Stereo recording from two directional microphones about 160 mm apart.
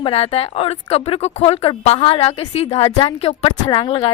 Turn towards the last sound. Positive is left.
turn(degrees=35)  # may be behind; listen again after turning